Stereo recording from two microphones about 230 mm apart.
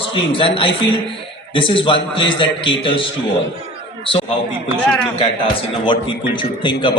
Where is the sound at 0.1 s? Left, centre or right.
Left.